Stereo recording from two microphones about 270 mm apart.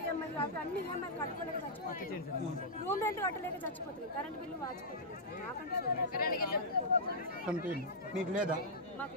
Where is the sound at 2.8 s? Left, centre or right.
Centre.